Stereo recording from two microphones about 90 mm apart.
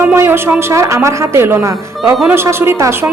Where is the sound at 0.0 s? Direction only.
20° right (ahead or behind).